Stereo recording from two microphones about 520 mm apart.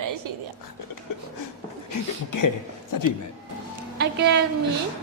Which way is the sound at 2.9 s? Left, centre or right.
Left.